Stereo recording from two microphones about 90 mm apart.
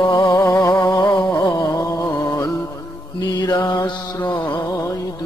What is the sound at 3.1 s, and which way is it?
Mantra, 50° left (ahead or behind).